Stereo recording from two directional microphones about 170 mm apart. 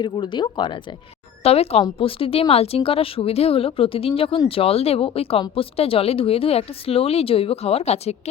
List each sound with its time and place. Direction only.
0.0 s speech: 25° left (ahead or behind)